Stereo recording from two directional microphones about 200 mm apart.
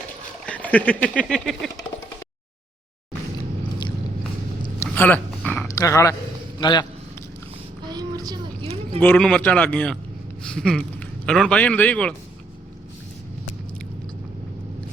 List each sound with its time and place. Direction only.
0.4 s a man's voice: 5° left (ahead or behind)
4.9 s dog: 10° left (ahead or behind)
5.6 s a man's voice: 15° left (ahead or behind)
7.9 s a sound: 20° right (ahead or behind)
8.6 s a sound: 30° right (ahead or behind)
9.0 s a man's voice: 5° left (ahead or behind)